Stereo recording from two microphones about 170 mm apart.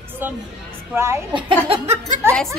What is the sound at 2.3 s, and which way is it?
Speech, 5° left (ahead or behind).